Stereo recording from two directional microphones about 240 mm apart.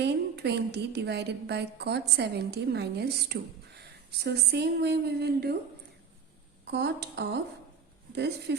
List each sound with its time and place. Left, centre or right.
0.0 s a woman's voice: right
6.7 s a woman's voice: right